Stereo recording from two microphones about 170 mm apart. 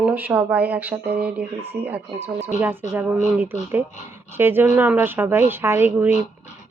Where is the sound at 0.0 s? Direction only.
10° right (ahead or behind).